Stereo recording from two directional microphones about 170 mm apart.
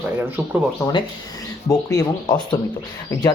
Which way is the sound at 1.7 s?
20° left (ahead or behind).